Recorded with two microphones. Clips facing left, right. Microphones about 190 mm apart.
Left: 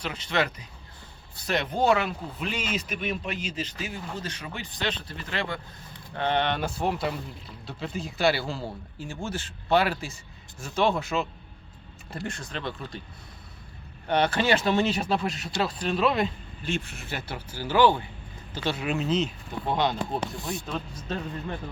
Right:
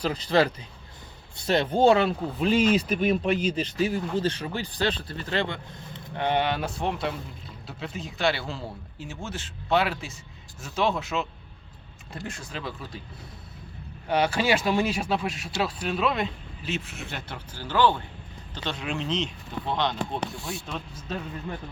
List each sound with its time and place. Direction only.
0.0 s speech: 35° right (ahead or behind); by 13.0 s 5° right (ahead or behind)
14.1 s speech: 10° right (ahead or behind)